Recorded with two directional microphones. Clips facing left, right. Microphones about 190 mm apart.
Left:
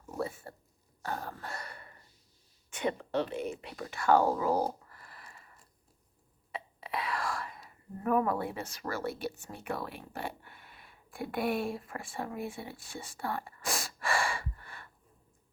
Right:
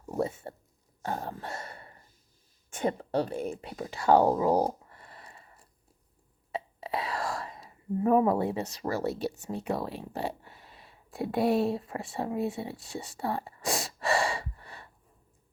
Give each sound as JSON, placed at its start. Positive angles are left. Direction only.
{"t": 0.0, "sound": "speech", "side_deg": -30}
{"t": 1.0, "sound": "a sound", "side_deg": -25}
{"t": 2.6, "sound": "speech", "side_deg": -45}
{"t": 3.8, "sound": "speech", "side_deg": -20}
{"t": 4.1, "sound": "a sound", "side_deg": -30}
{"t": 6.5, "sound": "whispering", "side_deg": -30}
{"t": 8.0, "sound": "speech", "side_deg": -25}
{"t": 13.1, "sound": "gasp", "side_deg": -25}